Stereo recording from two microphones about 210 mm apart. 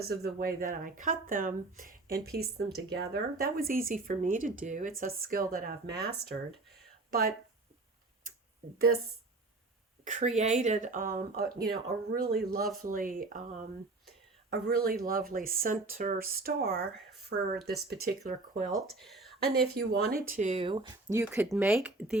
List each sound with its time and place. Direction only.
0.0 s speech: 50° right (ahead or behind)
10.0 s speech: 35° right (ahead or behind)
18.9 s a sound: centre (ahead or behind)
19.4 s speech: 50° right (ahead or behind); by 22.2 s 5° right (ahead or behind)